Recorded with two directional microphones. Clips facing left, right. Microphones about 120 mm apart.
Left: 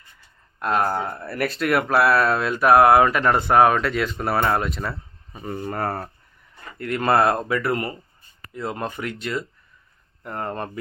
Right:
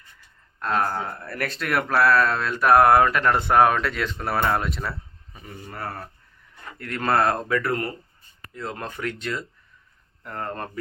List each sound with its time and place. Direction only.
0.6 s speech: 15° left (ahead or behind)
5.5 s speech: 55° left (ahead or behind)
6.7 s speech: 10° left (ahead or behind)
10.2 s speech: 15° left (ahead or behind)